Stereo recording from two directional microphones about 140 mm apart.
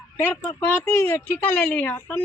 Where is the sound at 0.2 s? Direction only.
15° left (ahead or behind).